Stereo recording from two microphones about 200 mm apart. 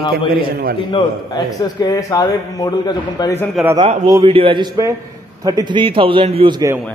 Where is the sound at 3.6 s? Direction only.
Centre (ahead or behind).